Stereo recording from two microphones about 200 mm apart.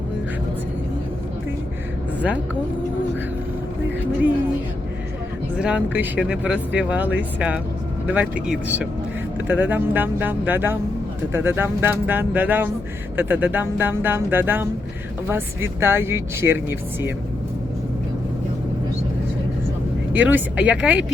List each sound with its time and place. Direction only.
5.5 s speech: 5° right (ahead or behind)
20.1 s speech: 5° right (ahead or behind)